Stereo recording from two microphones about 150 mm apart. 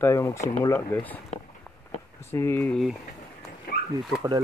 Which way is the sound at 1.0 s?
10° left (ahead or behind).